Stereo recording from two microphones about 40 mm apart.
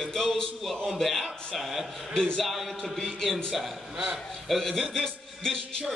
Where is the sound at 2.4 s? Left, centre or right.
Centre.